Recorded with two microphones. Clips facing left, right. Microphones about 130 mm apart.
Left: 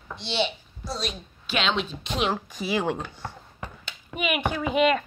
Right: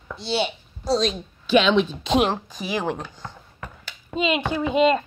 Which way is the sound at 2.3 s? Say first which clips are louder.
Even; 20° right (ahead or behind).